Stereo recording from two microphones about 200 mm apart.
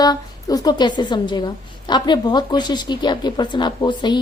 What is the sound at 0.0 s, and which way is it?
A woman's voice, 20° left (ahead or behind).